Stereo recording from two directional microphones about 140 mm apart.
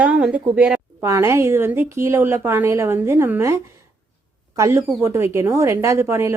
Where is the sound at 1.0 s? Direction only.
20° right (ahead or behind).